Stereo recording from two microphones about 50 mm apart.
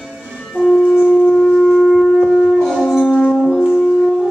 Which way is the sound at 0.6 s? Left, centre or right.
Right.